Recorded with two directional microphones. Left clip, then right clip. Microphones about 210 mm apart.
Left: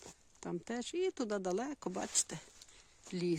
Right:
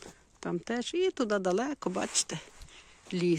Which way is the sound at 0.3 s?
5° left (ahead or behind).